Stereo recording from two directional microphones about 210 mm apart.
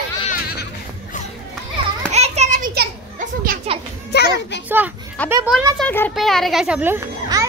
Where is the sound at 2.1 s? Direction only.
30° right (ahead or behind).